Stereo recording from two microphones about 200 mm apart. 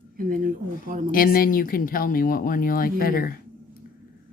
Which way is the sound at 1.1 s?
45° left (ahead or behind).